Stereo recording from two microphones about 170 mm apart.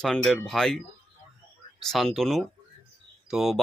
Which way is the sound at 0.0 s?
5° left (ahead or behind).